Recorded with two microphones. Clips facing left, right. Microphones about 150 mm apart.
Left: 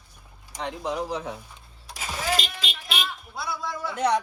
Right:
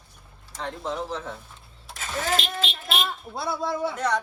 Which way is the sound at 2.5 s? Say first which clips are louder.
Right 4 dB; 50° right (ahead or behind).